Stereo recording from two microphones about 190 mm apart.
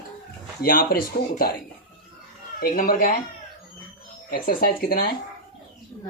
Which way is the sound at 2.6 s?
50° left (ahead or behind).